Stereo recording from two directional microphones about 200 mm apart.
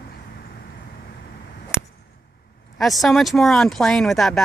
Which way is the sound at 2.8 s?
Centre (ahead or behind).